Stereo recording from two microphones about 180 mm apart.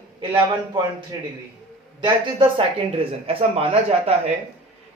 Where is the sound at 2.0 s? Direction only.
30° right (ahead or behind).